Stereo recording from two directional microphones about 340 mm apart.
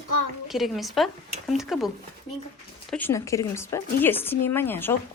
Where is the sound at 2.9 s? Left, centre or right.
Centre.